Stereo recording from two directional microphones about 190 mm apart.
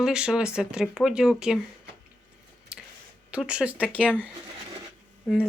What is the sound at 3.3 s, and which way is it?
Speech, 5° right (ahead or behind).